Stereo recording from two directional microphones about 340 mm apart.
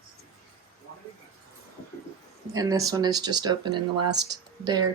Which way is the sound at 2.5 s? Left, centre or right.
Centre.